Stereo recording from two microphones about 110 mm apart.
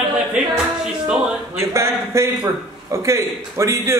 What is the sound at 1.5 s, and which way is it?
A man's voice, 25° right (ahead or behind).